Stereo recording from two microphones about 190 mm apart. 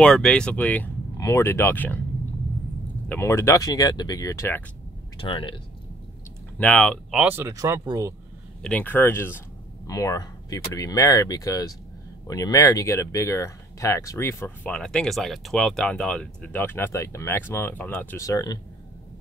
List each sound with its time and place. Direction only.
0.0 s speech: 5° left (ahead or behind)
3.1 s speech: 15° left (ahead or behind)
5.2 s speech: 25° left (ahead or behind)
6.6 s speech: 5° left (ahead or behind); by 8.1 s 15° right (ahead or behind)
8.6 s speech: 10° left (ahead or behind)